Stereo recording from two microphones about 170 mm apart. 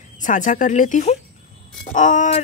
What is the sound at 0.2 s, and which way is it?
Speech, 45° left (ahead or behind).